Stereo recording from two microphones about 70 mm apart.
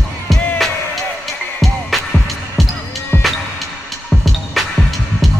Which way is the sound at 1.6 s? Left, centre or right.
Centre.